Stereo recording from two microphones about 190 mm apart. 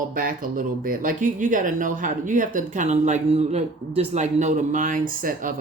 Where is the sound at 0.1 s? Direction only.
45° right (ahead or behind).